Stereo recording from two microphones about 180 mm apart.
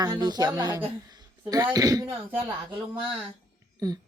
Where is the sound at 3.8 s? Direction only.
20° right (ahead or behind).